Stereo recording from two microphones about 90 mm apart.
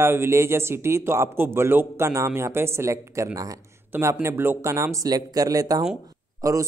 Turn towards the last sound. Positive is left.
turn(degrees=-40)  # may be behind; listen again after turning